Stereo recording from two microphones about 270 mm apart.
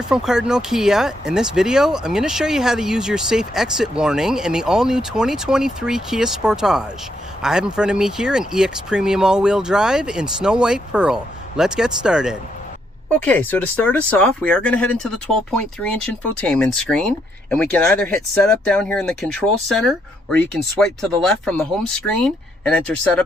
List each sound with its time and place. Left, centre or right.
0.1 s speech: centre